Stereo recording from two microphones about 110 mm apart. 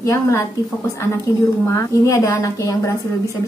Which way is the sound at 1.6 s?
25° left (ahead or behind).